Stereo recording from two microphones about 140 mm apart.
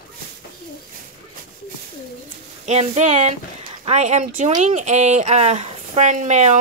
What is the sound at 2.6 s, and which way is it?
Speech, 55° right (ahead or behind).